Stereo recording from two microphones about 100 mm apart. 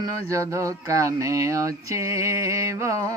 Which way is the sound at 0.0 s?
30° right (ahead or behind).